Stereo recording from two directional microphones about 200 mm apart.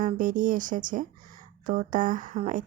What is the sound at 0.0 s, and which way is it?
A woman's voice, 40° right (ahead or behind).